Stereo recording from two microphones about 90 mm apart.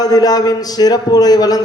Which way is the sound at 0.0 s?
45° left (ahead or behind).